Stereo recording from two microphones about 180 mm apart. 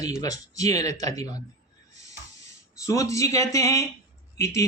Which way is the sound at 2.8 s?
15° left (ahead or behind).